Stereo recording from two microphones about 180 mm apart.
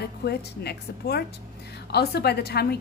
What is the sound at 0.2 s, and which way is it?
A woman's voice, 65° left (ahead or behind).